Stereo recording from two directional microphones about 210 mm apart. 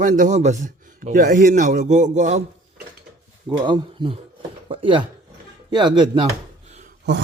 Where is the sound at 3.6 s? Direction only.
25° right (ahead or behind).